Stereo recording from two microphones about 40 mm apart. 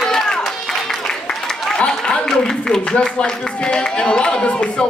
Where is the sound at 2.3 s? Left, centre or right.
Centre.